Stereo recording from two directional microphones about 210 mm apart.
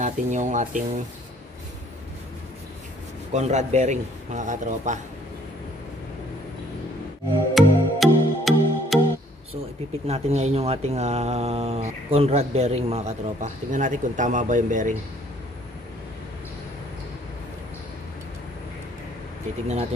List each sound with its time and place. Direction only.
0.0 s speech: 35° right (ahead or behind)
3.3 s speech: 35° right (ahead or behind)
7.5 s music: centre (ahead or behind)
10.0 s speech: 30° right (ahead or behind)